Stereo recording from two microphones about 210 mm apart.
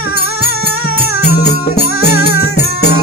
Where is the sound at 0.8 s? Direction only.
90° left.